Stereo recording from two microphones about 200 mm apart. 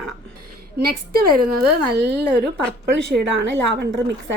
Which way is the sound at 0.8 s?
50° right (ahead or behind).